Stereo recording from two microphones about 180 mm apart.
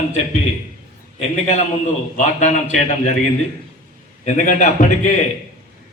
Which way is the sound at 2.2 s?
40° left (ahead or behind).